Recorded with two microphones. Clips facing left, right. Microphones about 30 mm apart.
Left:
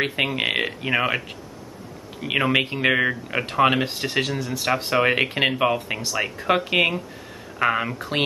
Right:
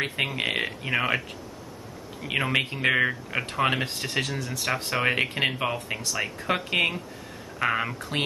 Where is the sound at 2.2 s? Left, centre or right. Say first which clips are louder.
Left 5 dB; centre.